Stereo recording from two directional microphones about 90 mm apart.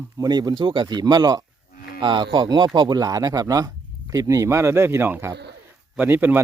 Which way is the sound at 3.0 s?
40° right (ahead or behind).